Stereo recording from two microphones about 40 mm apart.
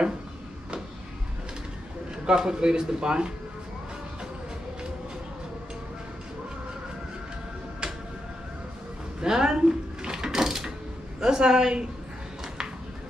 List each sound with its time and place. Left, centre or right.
2.2 s a man's voice: centre
9.2 s drawer open or close: centre
11.1 s a man's voice: centre